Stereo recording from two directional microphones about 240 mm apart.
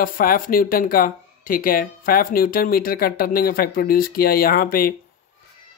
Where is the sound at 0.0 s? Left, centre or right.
Left.